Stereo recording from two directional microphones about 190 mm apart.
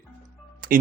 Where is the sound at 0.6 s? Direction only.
45° right (ahead or behind).